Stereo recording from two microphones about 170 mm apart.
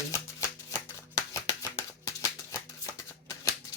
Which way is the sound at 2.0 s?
20° left (ahead or behind).